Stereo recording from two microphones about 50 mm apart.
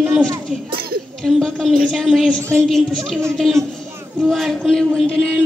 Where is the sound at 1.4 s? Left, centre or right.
Centre.